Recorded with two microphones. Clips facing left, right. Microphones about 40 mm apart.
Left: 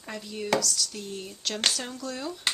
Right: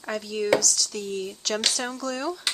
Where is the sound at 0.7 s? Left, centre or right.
Right.